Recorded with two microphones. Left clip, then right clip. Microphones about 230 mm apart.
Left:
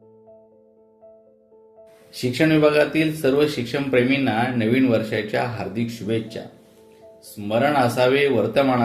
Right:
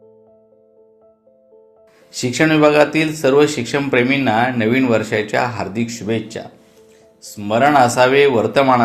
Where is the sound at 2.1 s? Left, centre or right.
Centre.